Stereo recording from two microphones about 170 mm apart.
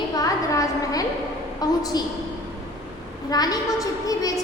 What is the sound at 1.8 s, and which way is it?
Speech, 20° left (ahead or behind).